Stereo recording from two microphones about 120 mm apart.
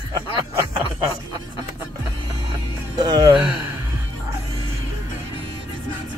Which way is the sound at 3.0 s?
35° right (ahead or behind).